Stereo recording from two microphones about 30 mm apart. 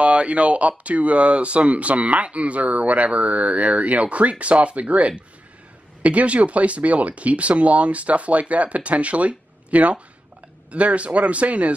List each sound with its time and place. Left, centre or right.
0.0 s speech: right